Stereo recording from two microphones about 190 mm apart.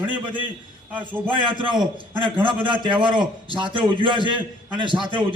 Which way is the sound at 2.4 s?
25° right (ahead or behind).